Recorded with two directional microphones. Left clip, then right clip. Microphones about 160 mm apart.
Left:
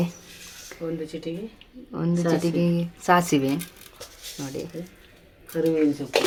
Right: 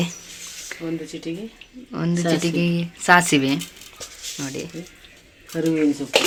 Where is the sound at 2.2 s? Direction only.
25° right (ahead or behind).